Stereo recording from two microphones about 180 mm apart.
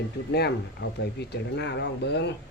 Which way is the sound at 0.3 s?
65° left (ahead or behind).